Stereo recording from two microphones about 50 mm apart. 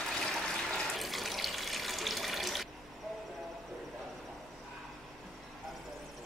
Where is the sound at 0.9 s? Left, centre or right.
Centre.